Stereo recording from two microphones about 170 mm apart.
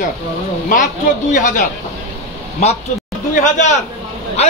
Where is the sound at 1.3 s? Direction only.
45° left (ahead or behind).